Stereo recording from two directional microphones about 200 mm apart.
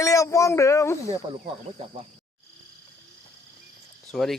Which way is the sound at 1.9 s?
30° right (ahead or behind).